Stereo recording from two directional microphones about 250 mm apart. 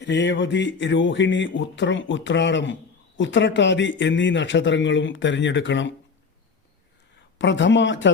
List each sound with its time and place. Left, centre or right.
0.0 s speech: left
7.3 s speech: left